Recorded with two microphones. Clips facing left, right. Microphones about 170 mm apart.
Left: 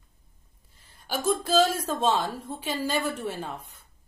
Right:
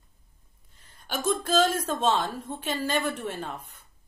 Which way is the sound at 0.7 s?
10° left (ahead or behind).